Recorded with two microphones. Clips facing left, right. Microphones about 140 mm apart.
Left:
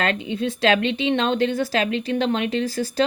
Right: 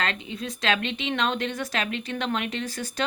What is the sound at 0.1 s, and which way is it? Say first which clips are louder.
Speech: left 9 dB; 30° right (ahead or behind).